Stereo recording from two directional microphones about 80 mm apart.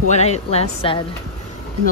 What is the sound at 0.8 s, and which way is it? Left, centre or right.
Speech, left.